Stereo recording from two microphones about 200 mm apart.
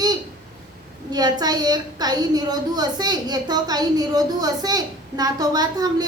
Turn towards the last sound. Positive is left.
turn(degrees=-20)  # may be behind; listen again after turning